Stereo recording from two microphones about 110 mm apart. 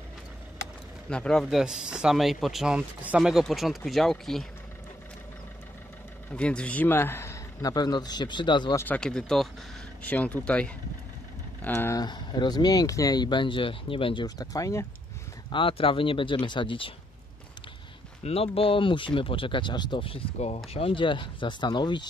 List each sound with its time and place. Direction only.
1.1 s speech: 5° left (ahead or behind)
6.3 s a man's voice: 10° left (ahead or behind)
7.6 s speech: 40° left (ahead or behind)
8.7 s a man's voice: 15° left (ahead or behind)
11.6 s speech: 20° left (ahead or behind)
12.0 s speech: 40° left (ahead or behind)
14.2 s speech: 35° left (ahead or behind)
15.5 s speech: 55° left (ahead or behind)
18.2 s speech: 65° left (ahead or behind)
20.3 s speech: 70° left (ahead or behind); by 22.0 s 45° left (ahead or behind)